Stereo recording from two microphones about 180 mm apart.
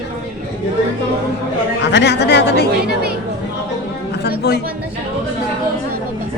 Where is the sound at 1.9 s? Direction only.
70° left (ahead or behind).